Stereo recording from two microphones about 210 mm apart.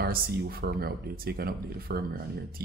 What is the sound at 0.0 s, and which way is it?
Speech, 45° right (ahead or behind).